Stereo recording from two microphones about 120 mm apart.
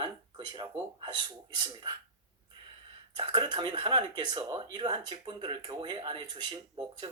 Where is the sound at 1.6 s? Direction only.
40° right (ahead or behind).